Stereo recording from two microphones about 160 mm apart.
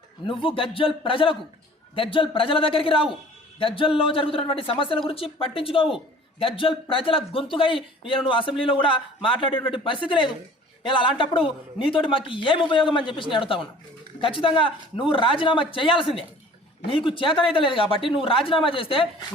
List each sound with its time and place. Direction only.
0.3 s a man's voice: 35° left (ahead or behind)